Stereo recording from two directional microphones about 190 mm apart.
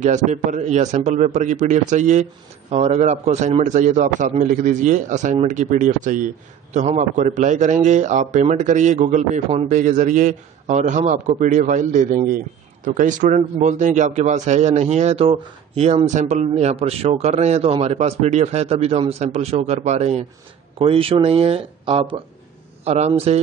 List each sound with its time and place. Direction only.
0.0 s a man's voice: 40° right (ahead or behind)